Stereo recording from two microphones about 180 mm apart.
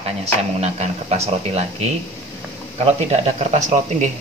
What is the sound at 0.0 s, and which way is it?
Speech, 35° right (ahead or behind).